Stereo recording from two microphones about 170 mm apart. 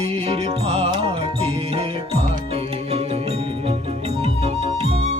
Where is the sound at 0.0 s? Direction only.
35° right (ahead or behind).